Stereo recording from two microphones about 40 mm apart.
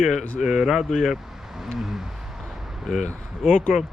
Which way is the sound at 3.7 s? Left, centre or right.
Centre.